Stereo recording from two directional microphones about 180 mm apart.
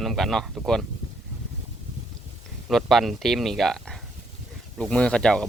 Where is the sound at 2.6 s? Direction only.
Centre (ahead or behind).